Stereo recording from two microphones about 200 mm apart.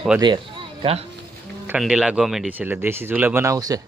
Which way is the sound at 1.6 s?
5° right (ahead or behind).